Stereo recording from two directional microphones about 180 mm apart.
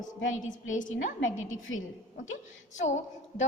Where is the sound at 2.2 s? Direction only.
40° left (ahead or behind).